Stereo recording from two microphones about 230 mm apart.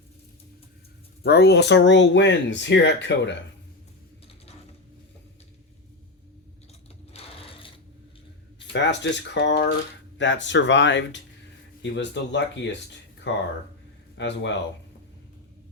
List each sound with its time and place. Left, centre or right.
1.2 s speech: left
7.1 s sewing machine: left
8.7 s speech: left